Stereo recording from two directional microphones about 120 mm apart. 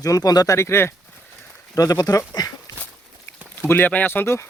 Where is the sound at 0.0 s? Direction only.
30° left (ahead or behind).